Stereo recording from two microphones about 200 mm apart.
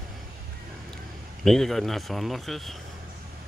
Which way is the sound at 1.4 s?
Centre (ahead or behind).